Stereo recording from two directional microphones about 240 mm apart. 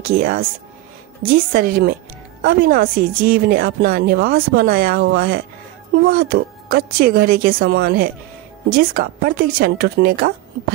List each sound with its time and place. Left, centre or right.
0.0 s a woman's voice: right